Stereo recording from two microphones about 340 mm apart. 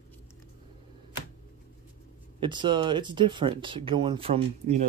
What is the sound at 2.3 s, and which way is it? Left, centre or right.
Speech, centre.